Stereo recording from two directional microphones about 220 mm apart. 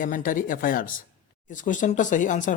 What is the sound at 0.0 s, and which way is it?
Speech, 35° left (ahead or behind).